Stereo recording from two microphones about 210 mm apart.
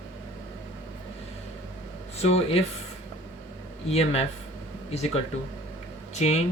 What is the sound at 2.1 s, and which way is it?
Speech, 30° left (ahead or behind).